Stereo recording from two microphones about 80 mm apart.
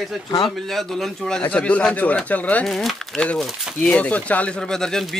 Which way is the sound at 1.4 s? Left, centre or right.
Centre.